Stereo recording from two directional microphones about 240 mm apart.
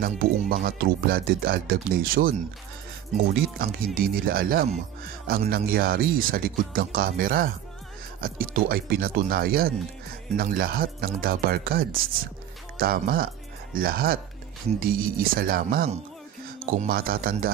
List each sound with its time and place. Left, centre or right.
0.0 s speech: right
3.5 s speech: right